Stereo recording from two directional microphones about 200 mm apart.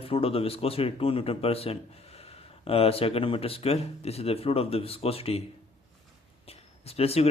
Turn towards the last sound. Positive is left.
turn(degrees=30)  # may be behind; listen again after turning